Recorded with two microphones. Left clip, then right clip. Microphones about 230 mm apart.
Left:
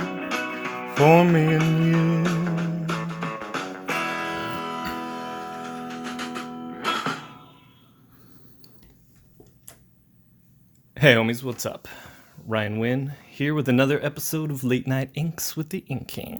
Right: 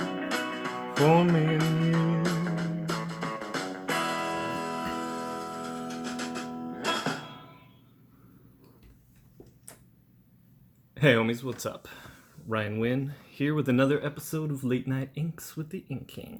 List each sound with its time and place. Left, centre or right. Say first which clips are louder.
0.0 s music: left 3 dB; centre
1.0 s music: left 7 dB; left
1.6 s music: left 5 dB; centre
10.9 s speech: left 6 dB; left